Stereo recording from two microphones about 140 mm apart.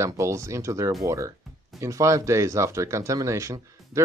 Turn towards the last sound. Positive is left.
turn(degrees=-20)  # may be behind; listen again after turning